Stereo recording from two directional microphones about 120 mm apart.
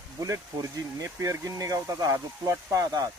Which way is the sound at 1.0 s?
25° right (ahead or behind).